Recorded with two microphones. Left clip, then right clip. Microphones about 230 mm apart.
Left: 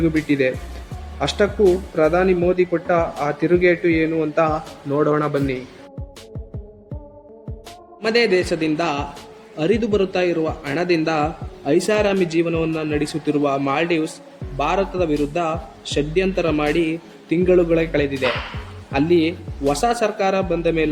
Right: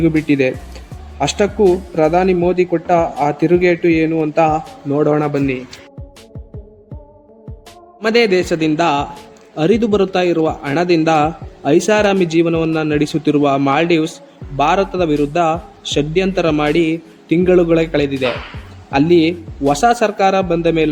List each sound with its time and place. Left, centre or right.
0.3 s a man's voice: right
8.0 s a man's voice: right